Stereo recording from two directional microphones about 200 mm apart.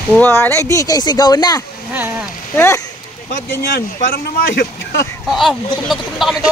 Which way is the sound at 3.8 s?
50° left (ahead or behind).